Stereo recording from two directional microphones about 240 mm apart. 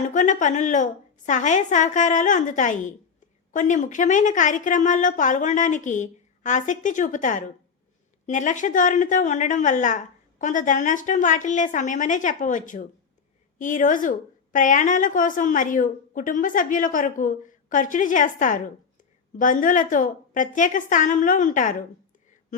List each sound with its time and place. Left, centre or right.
0.1 s a woman's voice: left